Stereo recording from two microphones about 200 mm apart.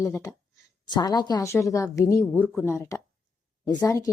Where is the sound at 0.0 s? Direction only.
15° left (ahead or behind).